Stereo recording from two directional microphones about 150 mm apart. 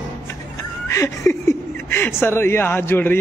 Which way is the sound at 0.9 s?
20° left (ahead or behind).